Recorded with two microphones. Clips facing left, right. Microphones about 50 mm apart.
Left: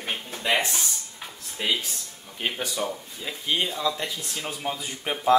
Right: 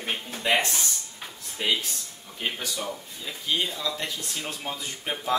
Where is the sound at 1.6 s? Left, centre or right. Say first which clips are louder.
Even; centre.